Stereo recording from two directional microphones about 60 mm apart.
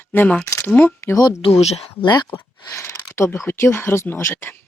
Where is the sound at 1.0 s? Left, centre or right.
Left.